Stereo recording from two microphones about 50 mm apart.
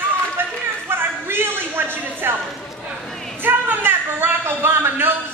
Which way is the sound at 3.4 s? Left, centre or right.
Right.